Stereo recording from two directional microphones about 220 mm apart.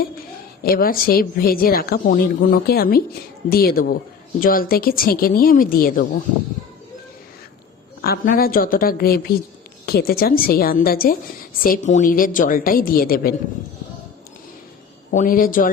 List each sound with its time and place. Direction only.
0.6 s a woman's voice: 40° left (ahead or behind)
8.0 s a woman's voice: 40° left (ahead or behind)
15.1 s speech: 35° left (ahead or behind)